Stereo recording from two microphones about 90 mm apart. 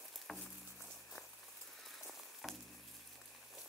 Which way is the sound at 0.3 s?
5° left (ahead or behind).